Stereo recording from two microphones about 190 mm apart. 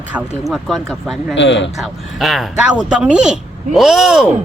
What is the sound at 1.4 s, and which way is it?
Speech, 70° left (ahead or behind).